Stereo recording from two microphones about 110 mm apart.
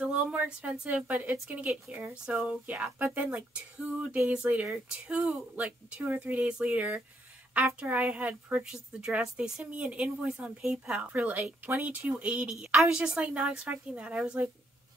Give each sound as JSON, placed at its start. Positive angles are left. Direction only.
{"t": 0.0, "sound": "a woman's voice", "side_deg": -10}